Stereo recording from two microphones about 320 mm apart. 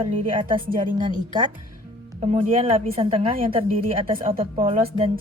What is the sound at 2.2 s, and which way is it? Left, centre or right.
A woman's voice, centre.